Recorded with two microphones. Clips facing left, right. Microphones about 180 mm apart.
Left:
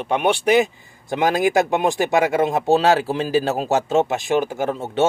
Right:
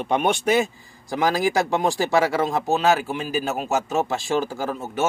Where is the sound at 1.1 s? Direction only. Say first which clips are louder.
Left 3 dB; 20° left (ahead or behind).